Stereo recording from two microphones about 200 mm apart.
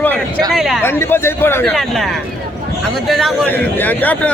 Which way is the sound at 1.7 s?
Centre (ahead or behind).